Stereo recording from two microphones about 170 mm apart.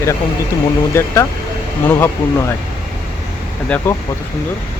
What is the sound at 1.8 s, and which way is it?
Speech, 15° left (ahead or behind).